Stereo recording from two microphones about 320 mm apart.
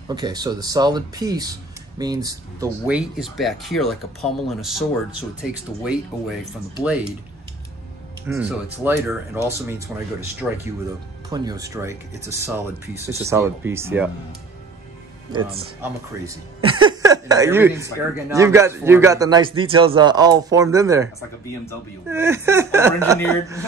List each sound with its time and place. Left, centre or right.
0.1 s speech: centre
8.3 s speech: centre
11.2 s speech: centre
15.3 s speech: centre
22.1 s speech: centre